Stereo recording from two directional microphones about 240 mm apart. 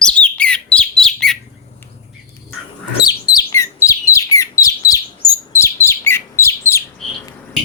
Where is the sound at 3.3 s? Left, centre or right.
Centre.